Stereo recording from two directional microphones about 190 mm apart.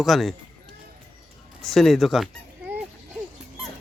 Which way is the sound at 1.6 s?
Centre (ahead or behind).